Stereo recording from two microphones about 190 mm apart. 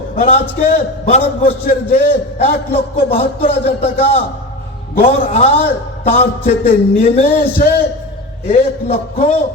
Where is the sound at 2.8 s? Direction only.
30° left (ahead or behind).